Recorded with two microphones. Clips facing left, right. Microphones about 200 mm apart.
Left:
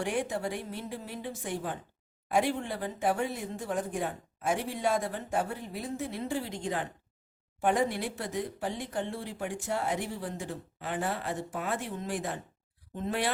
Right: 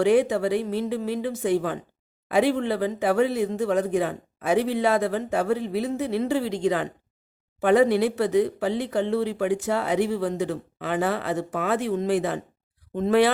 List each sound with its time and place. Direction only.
0.0 s speech: 85° right
12.9 s speech: 90° right